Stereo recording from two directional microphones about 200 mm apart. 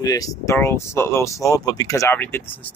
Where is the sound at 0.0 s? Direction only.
20° left (ahead or behind).